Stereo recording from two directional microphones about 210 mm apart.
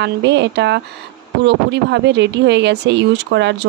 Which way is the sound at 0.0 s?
55° right (ahead or behind).